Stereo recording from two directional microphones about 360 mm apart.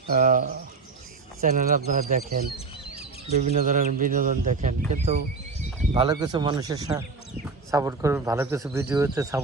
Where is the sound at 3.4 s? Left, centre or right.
Right.